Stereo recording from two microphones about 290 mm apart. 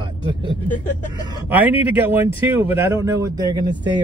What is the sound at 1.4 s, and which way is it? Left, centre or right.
Speech, centre.